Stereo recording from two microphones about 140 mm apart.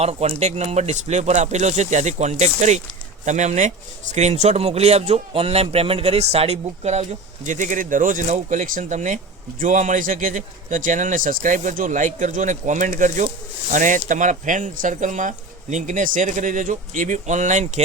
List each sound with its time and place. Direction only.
0.0 s speech: 50° right (ahead or behind)